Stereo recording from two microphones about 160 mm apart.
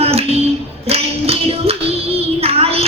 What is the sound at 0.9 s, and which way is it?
Music, 40° right (ahead or behind).